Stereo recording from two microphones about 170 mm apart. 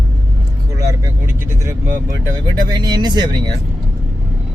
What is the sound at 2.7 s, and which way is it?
Speech, 25° right (ahead or behind).